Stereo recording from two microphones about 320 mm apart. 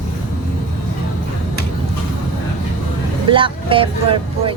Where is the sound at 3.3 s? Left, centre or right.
Centre.